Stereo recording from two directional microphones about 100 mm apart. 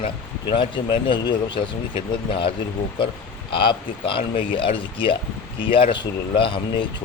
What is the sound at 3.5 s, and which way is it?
Speech, 60° left (ahead or behind).